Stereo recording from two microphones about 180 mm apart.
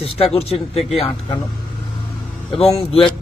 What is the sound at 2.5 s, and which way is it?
Speech, 30° left (ahead or behind).